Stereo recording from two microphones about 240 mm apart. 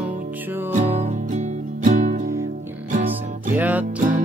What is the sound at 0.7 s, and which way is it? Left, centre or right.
Music, right.